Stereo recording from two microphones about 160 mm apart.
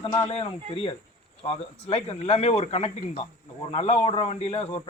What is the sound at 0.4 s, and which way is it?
A man's voice, 30° left (ahead or behind).